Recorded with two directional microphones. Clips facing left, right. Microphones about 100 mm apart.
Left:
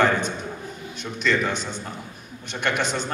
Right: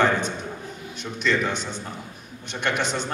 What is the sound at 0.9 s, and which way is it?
Speech, 20° right (ahead or behind).